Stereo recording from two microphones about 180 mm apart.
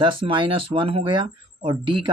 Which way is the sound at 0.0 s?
30° right (ahead or behind).